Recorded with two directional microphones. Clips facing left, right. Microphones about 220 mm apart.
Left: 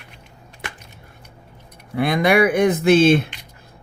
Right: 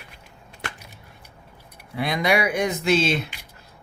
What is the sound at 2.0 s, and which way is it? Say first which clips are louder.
Speech: left 6 dB; 55° left (ahead or behind).